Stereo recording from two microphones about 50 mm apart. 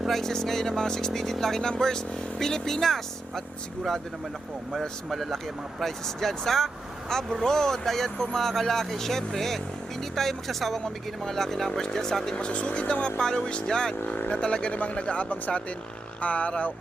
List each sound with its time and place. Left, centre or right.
0.0 s speech: centre
5.0 s speech: centre; by 16.7 s left